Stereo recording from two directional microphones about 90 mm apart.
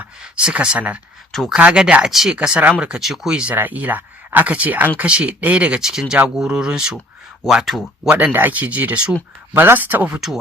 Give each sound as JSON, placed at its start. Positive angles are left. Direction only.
{"t": 0.2, "sound": "speech", "side_deg": -10}
{"t": 1.3, "sound": "speech", "side_deg": 5}
{"t": 1.5, "sound": "speech", "side_deg": -10}
{"t": 3.5, "sound": "speech", "side_deg": -20}
{"t": 8.0, "sound": "speech", "side_deg": -15}